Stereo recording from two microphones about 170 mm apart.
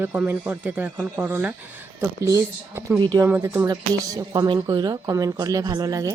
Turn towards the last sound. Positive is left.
turn(degrees=-20)  # may be behind; listen again after turning